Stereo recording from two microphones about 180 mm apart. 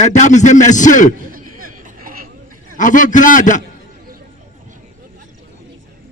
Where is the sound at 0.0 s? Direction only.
40° left (ahead or behind).